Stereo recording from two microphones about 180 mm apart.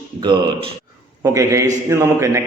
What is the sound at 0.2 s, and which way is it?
A man's voice, 25° right (ahead or behind).